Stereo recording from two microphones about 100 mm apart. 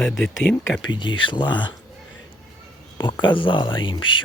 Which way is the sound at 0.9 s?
55° left (ahead or behind).